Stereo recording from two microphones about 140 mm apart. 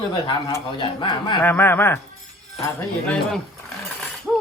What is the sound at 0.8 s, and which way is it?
Speech, 35° left (ahead or behind).